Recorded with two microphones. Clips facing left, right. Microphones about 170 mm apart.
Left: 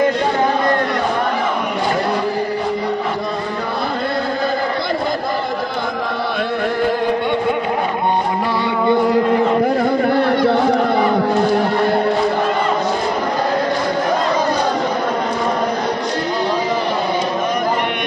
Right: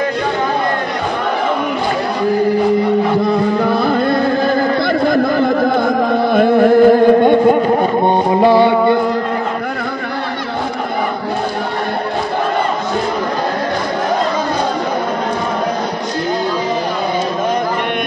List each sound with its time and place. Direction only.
6.3 s music: 50° right (ahead or behind)